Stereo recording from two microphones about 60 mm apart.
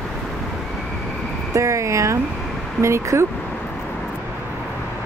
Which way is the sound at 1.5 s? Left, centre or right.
Right.